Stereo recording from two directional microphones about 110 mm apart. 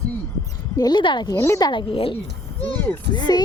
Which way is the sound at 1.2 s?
25° left (ahead or behind).